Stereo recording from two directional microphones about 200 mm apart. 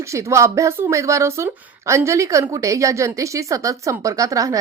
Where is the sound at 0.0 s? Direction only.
15° right (ahead or behind).